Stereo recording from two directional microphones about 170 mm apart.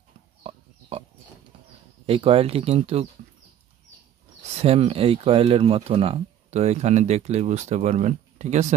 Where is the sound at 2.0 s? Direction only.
35° right (ahead or behind).